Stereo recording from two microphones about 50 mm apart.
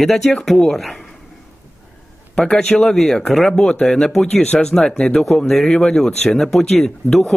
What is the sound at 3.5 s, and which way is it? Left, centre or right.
Speech, centre.